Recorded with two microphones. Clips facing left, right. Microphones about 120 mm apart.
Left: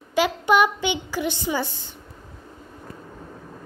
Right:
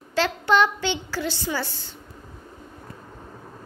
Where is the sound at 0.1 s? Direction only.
15° left (ahead or behind).